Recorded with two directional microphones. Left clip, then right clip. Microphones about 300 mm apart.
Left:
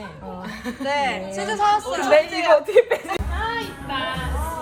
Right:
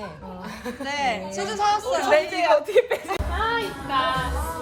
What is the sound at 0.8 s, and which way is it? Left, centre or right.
Speech, centre.